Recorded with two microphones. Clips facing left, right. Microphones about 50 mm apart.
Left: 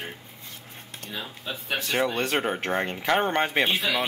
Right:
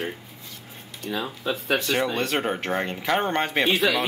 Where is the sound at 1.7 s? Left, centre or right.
Centre.